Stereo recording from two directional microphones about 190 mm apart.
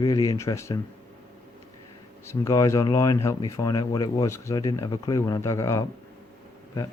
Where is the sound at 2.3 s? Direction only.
15° left (ahead or behind).